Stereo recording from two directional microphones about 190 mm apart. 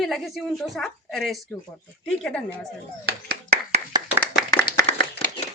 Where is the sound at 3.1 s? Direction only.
50° right (ahead or behind).